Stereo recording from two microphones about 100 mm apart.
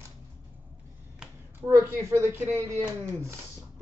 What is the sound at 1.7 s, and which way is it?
Speech, 30° right (ahead or behind).